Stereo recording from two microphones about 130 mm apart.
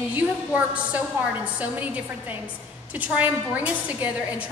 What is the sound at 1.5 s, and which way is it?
A woman's voice, 10° right (ahead or behind).